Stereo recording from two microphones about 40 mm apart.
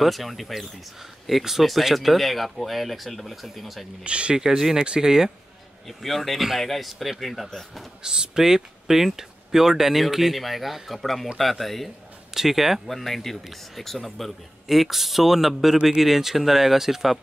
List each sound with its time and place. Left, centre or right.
0.0 s speech: centre
4.0 s speech: right
4.4 s speech: centre
5.9 s speech: centre
8.0 s speech: centre
12.8 s speech: centre